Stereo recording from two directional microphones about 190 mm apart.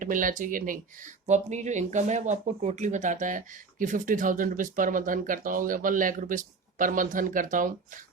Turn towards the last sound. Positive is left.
turn(degrees=-45)  # may be behind; listen again after turning